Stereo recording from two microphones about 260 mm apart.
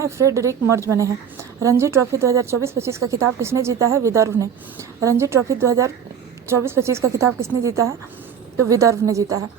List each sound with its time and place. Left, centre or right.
0.0 s a woman's voice: centre